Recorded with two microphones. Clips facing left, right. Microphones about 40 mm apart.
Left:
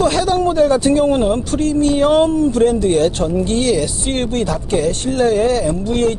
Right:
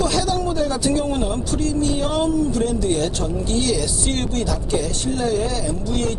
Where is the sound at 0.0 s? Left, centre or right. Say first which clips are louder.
Left 6 dB; left.